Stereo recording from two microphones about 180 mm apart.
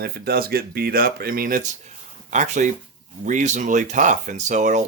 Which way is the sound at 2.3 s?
40° right (ahead or behind).